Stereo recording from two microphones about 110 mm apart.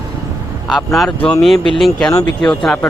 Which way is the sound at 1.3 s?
5° left (ahead or behind).